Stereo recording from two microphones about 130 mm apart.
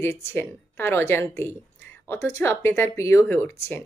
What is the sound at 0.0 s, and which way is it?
Speech, 20° left (ahead or behind).